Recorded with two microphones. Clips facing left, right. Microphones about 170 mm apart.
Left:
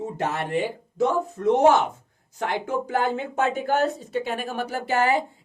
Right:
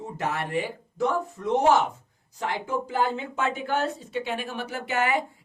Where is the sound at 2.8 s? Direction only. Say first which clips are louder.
Left 2 dB; 50° left (ahead or behind); by 5.2 s 35° left (ahead or behind).